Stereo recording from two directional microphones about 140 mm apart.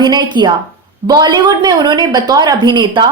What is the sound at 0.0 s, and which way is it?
A woman's voice, 30° right (ahead or behind).